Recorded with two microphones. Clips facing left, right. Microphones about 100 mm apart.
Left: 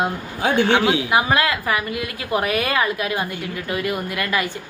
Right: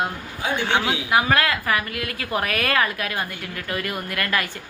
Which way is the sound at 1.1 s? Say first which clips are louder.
Left 1 dB; 15° left (ahead or behind).